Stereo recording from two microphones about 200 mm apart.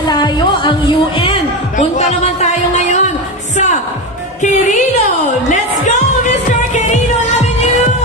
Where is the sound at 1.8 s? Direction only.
35° left (ahead or behind).